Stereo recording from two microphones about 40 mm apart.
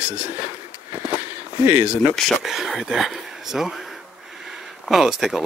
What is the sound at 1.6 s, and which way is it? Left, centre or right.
Speech, right.